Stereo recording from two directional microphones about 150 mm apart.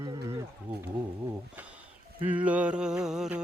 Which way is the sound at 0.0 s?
25° right (ahead or behind).